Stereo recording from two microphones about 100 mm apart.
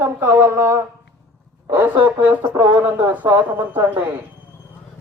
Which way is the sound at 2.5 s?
30° right (ahead or behind).